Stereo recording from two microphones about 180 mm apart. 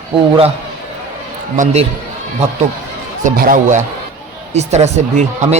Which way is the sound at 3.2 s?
50° right (ahead or behind).